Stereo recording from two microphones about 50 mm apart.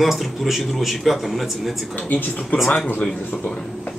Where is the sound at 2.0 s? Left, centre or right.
Left.